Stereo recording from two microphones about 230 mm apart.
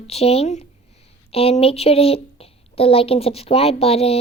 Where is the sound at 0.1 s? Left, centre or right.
Left.